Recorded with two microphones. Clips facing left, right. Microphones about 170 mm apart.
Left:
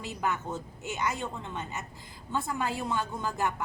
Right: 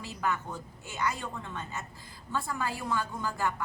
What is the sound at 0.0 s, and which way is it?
A woman's voice, 20° left (ahead or behind).